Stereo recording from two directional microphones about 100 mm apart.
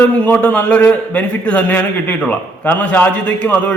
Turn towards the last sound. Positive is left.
turn(degrees=15)  # may be behind; listen again after turning